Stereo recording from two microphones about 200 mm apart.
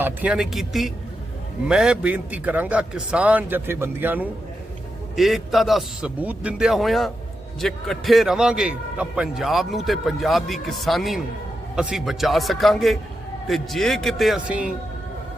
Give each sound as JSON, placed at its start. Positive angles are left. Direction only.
{"t": 0.0, "sound": "a man's voice", "side_deg": -5}